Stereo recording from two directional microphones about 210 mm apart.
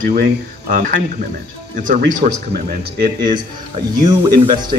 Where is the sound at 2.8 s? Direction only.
20° right (ahead or behind).